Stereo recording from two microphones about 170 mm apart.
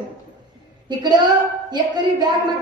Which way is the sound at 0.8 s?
25° right (ahead or behind).